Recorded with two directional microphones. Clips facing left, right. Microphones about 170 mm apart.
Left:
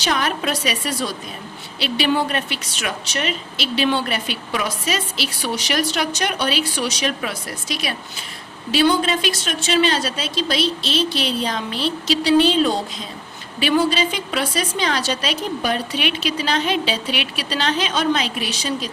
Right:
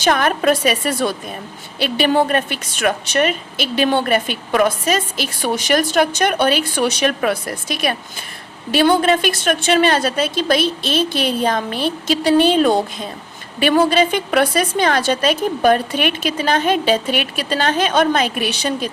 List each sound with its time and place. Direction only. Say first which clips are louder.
0.0 s a woman's voice: right 6 dB; 50° right (ahead or behind)